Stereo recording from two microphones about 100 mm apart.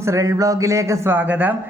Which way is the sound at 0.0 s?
30° right (ahead or behind).